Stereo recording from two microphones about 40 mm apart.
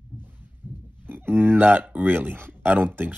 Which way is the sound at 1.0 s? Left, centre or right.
Right.